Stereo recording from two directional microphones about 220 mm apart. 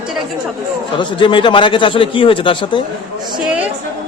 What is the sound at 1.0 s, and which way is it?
Speech, 20° left (ahead or behind).